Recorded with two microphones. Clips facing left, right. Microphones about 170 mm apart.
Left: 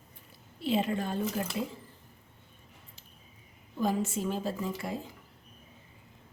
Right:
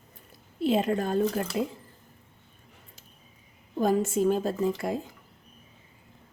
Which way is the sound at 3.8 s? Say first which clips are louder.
Right 6 dB; 50° right (ahead or behind).